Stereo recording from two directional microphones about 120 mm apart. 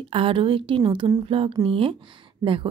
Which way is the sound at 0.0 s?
50° right (ahead or behind).